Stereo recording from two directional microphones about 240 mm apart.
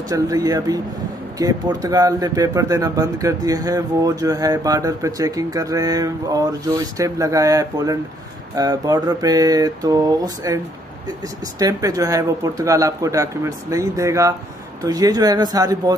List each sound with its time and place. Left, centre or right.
0.1 s speech: centre
11.6 s speech: centre